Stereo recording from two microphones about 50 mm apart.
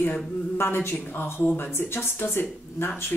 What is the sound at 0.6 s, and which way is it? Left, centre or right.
Speech, left.